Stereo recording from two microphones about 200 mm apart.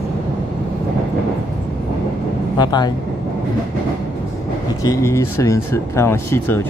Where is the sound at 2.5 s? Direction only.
20° left (ahead or behind).